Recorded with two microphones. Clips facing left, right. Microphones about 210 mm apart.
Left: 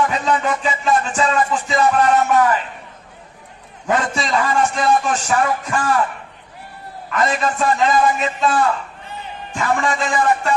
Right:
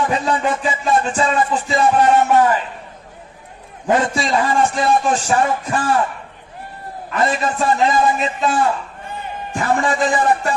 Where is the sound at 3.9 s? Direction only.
30° right (ahead or behind).